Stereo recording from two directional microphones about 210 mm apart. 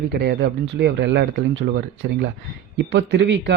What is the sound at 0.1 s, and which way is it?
A man's voice, 55° right (ahead or behind).